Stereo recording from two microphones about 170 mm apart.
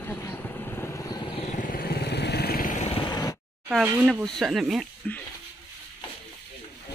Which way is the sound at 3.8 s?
10° right (ahead or behind).